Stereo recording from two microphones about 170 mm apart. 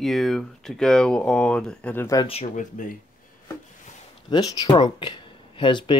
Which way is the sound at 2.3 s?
45° left (ahead or behind).